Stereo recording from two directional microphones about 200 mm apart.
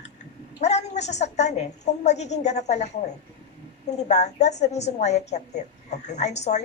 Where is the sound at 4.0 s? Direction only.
35° left (ahead or behind).